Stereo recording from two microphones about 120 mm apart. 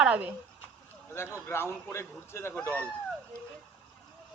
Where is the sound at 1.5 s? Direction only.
20° left (ahead or behind).